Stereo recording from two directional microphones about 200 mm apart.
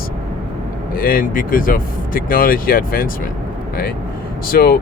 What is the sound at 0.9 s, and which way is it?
Speech, 45° left (ahead or behind).